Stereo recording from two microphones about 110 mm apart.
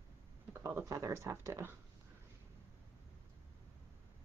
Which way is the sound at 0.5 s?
20° right (ahead or behind).